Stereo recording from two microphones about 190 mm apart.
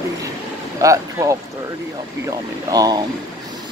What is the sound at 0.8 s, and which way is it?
Speech, 15° right (ahead or behind).